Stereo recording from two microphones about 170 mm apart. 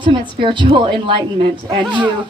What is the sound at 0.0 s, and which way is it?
Speech, 30° right (ahead or behind).